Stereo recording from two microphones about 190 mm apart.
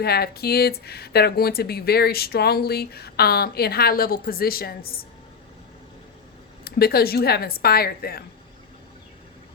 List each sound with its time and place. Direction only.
0.0 s speech: 55° left (ahead or behind)
6.7 s speech: 55° left (ahead or behind)